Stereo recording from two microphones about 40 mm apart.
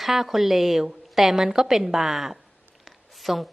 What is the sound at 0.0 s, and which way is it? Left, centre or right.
A woman's voice, centre.